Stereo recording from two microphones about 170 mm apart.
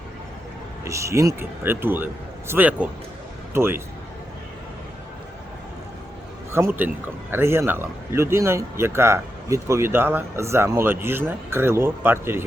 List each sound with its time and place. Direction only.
0.9 s a man's voice: 15° right (ahead or behind)
6.5 s a man's voice: 15° right (ahead or behind)